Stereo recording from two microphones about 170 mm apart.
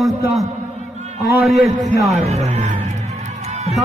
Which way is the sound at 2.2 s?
40° right (ahead or behind).